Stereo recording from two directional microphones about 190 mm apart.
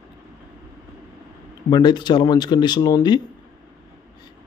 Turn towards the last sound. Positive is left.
turn(degrees=20)  # may be behind; listen again after turning